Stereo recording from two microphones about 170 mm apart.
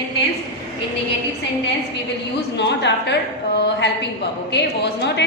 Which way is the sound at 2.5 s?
90° left.